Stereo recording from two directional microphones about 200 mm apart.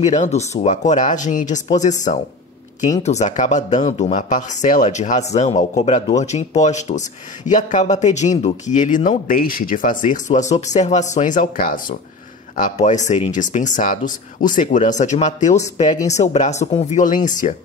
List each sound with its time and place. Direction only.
0.0 s speech: 35° left (ahead or behind)